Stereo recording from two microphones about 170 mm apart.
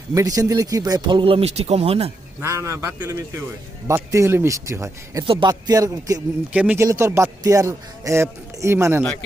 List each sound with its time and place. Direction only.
0.1 s a man's voice: 20° right (ahead or behind); by 2.1 s 35° right (ahead or behind)
2.4 s speech: 15° right (ahead or behind)
5.2 s a man's voice: 30° right (ahead or behind)
6.5 s speech: 10° right (ahead or behind)